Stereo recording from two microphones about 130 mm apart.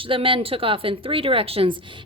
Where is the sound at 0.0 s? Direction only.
40° right (ahead or behind).